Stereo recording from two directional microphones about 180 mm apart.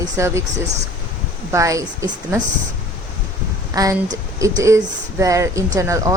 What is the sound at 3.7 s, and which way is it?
Speech, 20° right (ahead or behind).